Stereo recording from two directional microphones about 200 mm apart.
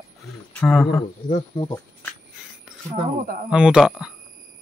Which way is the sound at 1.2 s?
20° left (ahead or behind).